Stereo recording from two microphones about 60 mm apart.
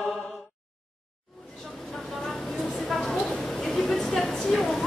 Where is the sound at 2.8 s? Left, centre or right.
Centre.